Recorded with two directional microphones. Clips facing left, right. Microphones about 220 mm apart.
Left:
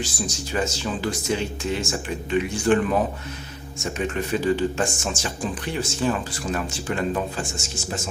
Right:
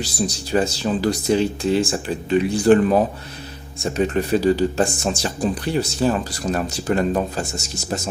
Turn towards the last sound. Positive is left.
turn(degrees=-40)  # may be behind; listen again after turning